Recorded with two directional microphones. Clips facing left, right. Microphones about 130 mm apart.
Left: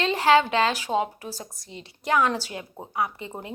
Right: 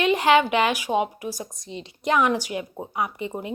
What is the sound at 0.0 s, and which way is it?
A woman's voice, 20° right (ahead or behind).